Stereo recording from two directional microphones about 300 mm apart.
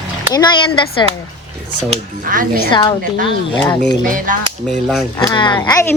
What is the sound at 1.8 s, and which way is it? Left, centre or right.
Speech, right.